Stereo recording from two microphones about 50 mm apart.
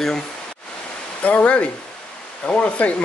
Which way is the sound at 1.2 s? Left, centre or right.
Left.